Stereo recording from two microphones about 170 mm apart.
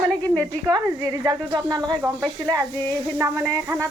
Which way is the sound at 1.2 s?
20° right (ahead or behind).